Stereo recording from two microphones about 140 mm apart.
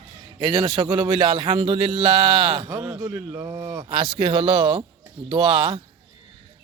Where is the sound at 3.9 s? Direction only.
35° right (ahead or behind).